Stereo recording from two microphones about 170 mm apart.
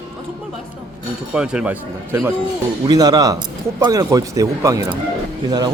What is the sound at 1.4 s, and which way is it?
Speech, 5° right (ahead or behind).